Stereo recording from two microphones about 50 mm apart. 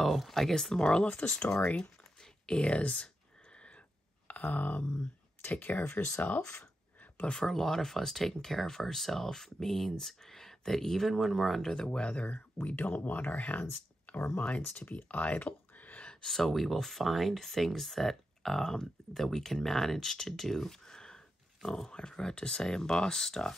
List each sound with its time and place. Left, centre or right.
0.0 s speech: centre; by 3.1 s left
4.3 s speech: left
7.2 s speech: centre
11.7 s speech: centre
14.1 s a sound: left
14.6 s speech: left
16.3 s speech: centre